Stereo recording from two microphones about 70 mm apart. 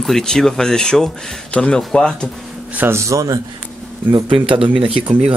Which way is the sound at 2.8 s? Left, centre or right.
Right.